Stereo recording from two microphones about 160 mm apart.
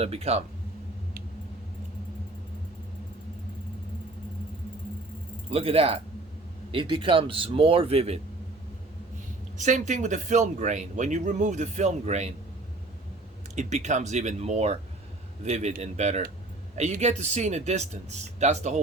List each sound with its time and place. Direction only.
0.0 s speech: 40° right (ahead or behind)
5.5 s speech: 40° right (ahead or behind)
9.6 s speech: 50° right (ahead or behind)
13.6 s speech: 45° right (ahead or behind)